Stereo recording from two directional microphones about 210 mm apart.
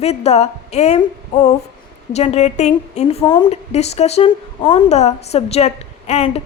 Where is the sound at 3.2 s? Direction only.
20° left (ahead or behind).